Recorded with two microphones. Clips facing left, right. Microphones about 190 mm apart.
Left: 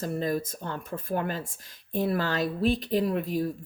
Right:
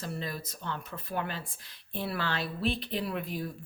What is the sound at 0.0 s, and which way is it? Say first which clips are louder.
Speech: left 9 dB; 45° left (ahead or behind).